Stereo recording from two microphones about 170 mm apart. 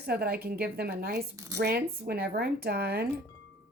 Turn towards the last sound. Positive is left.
turn(degrees=-70)  # may be behind; listen again after turning